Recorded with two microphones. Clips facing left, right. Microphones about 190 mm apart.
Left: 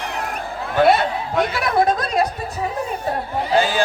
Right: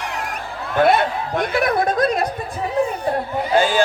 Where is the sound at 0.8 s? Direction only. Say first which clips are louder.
Even; 50° right (ahead or behind).